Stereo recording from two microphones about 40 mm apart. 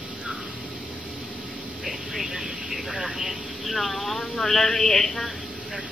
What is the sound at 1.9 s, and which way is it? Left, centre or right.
Vehicle, centre.